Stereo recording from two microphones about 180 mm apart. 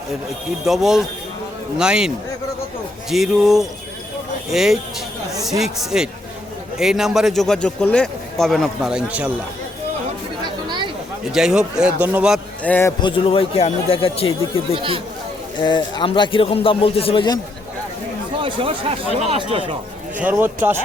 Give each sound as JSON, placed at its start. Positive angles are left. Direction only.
{"t": 0.6, "sound": "a man's voice", "side_deg": 0}
{"t": 11.3, "sound": "a man's voice", "side_deg": -5}
{"t": 12.6, "sound": "a man's voice", "side_deg": 10}
{"t": 13.0, "sound": "a man's voice", "side_deg": 25}
{"t": 14.8, "sound": "speech", "side_deg": -30}
{"t": 15.6, "sound": "a man's voice", "side_deg": 25}
{"t": 18.3, "sound": "speech", "side_deg": -30}
{"t": 20.1, "sound": "speech", "side_deg": -10}